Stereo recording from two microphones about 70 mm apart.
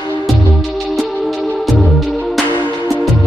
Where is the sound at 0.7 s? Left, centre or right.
Centre.